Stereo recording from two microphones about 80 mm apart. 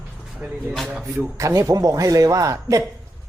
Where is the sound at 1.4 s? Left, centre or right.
Right.